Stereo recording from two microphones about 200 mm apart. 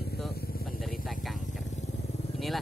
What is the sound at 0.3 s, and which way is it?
Vehicle, 50° left (ahead or behind).